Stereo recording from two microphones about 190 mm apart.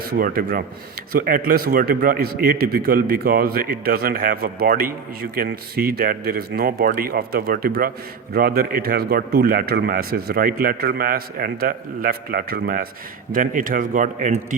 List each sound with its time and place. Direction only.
0.1 s a man's voice: 50° right (ahead or behind)